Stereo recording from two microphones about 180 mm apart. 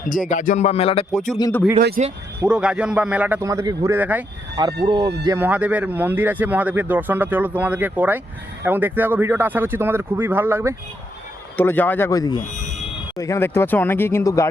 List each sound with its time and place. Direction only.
0.1 s music: 45° left (ahead or behind)
1.4 s speech: 20° left (ahead or behind)
2.0 s speech: 40° right (ahead or behind)
2.5 s speech: 5° right (ahead or behind); by 3.9 s 20° right (ahead or behind)
3.9 s speech: 10° right (ahead or behind)
4.8 s speech: 20° right (ahead or behind)
5.4 s speech: 10° right (ahead or behind)
11.5 s speech: 10° left (ahead or behind)
12.4 s speech: 40° left (ahead or behind)
13.1 s speech: 15° left (ahead or behind)